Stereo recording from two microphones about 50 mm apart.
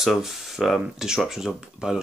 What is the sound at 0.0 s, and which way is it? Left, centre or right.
Speech, centre.